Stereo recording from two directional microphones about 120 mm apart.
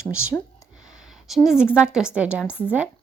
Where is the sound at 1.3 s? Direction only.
5° right (ahead or behind).